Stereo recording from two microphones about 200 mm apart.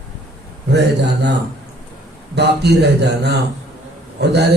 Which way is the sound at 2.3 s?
55° right (ahead or behind).